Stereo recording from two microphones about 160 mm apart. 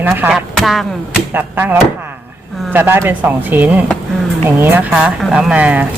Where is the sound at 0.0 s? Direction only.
10° right (ahead or behind).